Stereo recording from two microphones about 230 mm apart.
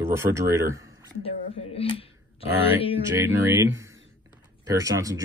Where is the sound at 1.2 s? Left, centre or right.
Left.